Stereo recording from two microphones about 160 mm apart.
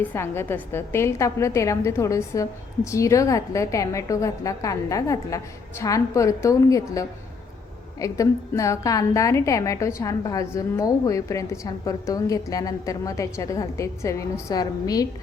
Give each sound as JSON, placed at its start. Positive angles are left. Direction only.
{"t": 0.0, "sound": "a woman's voice", "side_deg": 15}